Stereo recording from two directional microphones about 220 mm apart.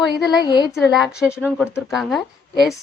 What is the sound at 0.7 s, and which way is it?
Speech, centre (ahead or behind).